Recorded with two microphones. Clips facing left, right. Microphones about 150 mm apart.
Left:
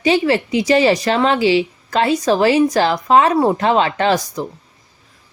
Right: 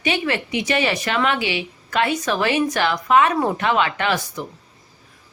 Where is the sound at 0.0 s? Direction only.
35° left (ahead or behind).